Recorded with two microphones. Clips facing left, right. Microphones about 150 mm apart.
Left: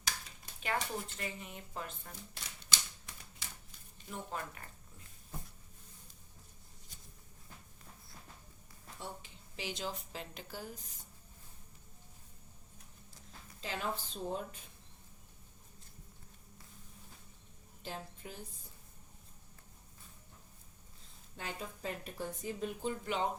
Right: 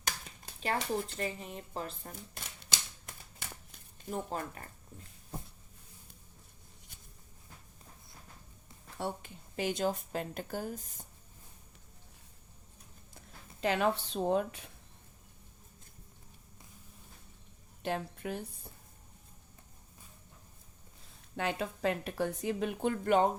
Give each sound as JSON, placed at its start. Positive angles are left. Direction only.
{"t": 0.6, "sound": "speech", "side_deg": -35}
{"t": 3.1, "sound": "typewriter", "side_deg": -55}
{"t": 4.1, "sound": "speech", "side_deg": -35}
{"t": 9.0, "sound": "speech", "side_deg": -55}
{"t": 13.6, "sound": "a woman's voice", "side_deg": -70}
{"t": 17.8, "sound": "speech", "side_deg": -65}
{"t": 21.3, "sound": "a woman's voice", "side_deg": -75}